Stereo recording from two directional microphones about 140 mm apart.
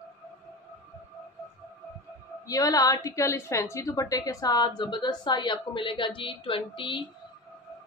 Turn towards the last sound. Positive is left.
turn(degrees=40)  # may be behind; listen again after turning